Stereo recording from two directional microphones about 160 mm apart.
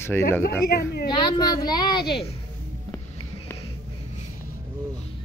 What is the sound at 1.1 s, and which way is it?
A woman's voice, 25° left (ahead or behind).